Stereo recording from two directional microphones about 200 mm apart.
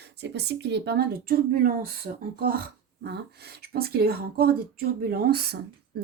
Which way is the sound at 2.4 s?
50° right (ahead or behind).